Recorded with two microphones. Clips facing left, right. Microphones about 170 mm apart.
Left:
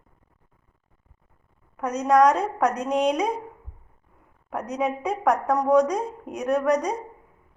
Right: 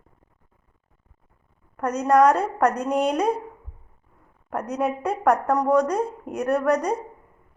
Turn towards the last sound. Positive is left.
turn(degrees=-5)  # may be behind; listen again after turning